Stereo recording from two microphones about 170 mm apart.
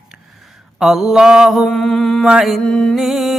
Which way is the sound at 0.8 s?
Centre (ahead or behind).